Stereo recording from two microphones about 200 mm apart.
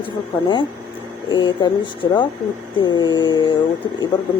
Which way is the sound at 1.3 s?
25° left (ahead or behind).